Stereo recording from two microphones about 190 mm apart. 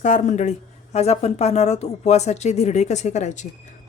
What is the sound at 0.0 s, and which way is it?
Speech, 40° left (ahead or behind).